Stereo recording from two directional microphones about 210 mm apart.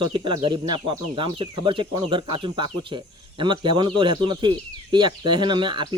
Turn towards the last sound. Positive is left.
turn(degrees=-20)  # may be behind; listen again after turning